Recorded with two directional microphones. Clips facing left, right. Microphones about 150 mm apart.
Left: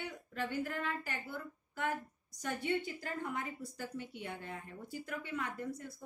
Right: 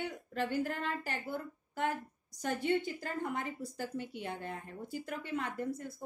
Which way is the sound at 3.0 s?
30° right (ahead or behind).